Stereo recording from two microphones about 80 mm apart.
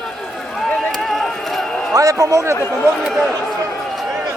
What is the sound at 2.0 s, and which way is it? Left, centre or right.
Speech, right.